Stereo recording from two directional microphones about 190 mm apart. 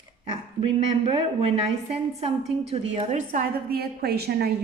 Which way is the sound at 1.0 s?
30° right (ahead or behind).